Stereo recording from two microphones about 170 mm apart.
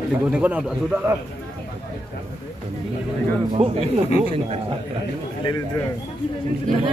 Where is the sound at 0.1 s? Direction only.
10° right (ahead or behind).